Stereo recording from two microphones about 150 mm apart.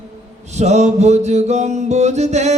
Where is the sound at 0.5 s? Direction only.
50° right (ahead or behind).